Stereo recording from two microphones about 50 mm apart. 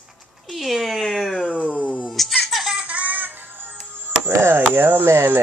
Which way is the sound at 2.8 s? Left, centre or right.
Right.